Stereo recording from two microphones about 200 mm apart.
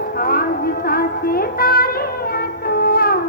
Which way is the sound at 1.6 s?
45° left (ahead or behind).